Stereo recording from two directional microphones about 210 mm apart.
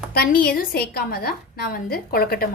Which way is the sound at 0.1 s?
45° left (ahead or behind).